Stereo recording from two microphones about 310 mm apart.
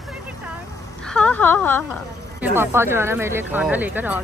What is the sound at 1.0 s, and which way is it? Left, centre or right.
Speech, centre.